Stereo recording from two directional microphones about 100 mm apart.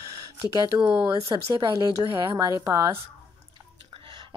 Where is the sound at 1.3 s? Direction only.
45° right (ahead or behind).